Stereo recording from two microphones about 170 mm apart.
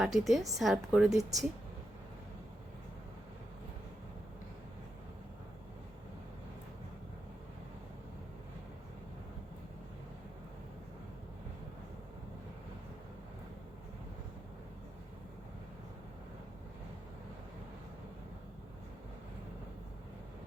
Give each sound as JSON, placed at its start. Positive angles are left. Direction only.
{"t": 0.0, "sound": "a woman's voice", "side_deg": 0}
{"t": 1.2, "sound": "speech", "side_deg": -20}